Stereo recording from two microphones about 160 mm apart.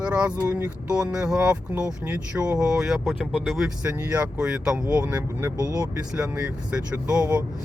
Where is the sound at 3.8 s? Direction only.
15° right (ahead or behind).